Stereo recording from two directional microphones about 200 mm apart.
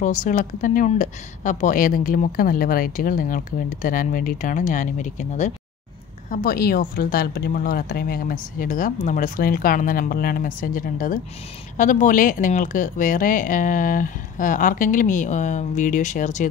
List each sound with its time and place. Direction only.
0.0 s speech: 40° left (ahead or behind)